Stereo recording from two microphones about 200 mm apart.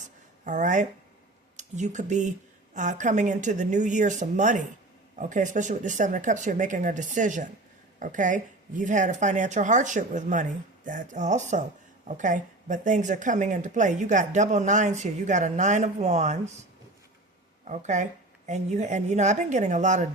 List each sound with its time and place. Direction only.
0.4 s speech: 40° right (ahead or behind)
17.7 s speech: 35° right (ahead or behind)